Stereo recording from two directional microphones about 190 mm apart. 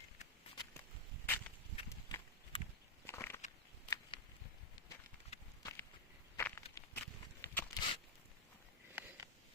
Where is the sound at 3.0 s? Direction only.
15° left (ahead or behind).